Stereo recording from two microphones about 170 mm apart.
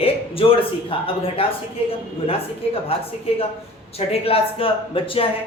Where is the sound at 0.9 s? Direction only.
35° left (ahead or behind).